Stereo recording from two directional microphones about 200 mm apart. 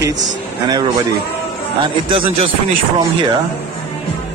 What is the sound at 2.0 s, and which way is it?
Speech, 25° right (ahead or behind).